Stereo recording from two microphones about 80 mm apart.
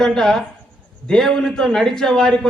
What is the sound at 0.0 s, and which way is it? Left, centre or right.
A man's voice, centre.